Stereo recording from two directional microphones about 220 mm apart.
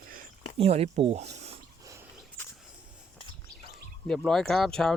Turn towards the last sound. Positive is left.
turn(degrees=0)  # may be behind; listen again after turning